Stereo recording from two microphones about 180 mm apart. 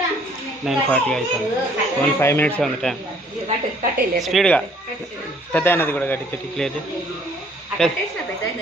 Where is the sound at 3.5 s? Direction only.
40° right (ahead or behind).